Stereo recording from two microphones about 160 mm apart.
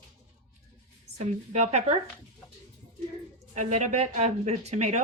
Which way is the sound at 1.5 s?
45° right (ahead or behind).